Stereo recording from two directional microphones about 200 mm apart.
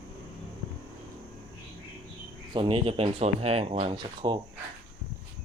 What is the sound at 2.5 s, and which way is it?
Speech, 25° right (ahead or behind).